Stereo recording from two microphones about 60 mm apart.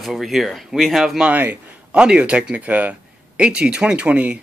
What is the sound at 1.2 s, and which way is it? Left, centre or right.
Speech, right.